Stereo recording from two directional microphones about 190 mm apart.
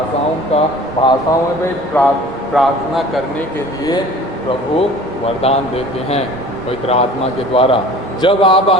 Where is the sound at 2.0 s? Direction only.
5° left (ahead or behind).